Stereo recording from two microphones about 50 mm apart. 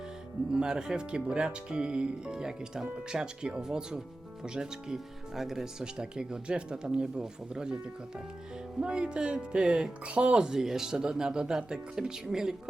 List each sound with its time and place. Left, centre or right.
0.5 s speech: centre
8.8 s speech: centre